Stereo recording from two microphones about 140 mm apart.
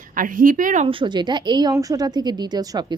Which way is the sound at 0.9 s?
35° right (ahead or behind).